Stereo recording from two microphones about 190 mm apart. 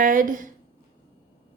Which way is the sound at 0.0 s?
45° right (ahead or behind).